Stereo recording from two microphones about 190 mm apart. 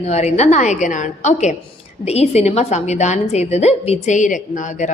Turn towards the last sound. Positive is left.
turn(degrees=40)  # may be behind; listen again after turning